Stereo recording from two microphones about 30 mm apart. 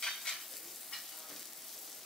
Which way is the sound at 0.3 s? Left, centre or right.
Centre.